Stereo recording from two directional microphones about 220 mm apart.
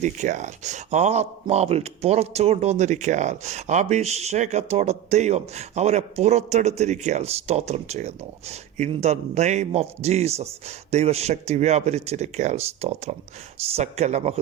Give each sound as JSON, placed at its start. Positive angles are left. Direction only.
{"t": 0.0, "sound": "speech", "side_deg": -35}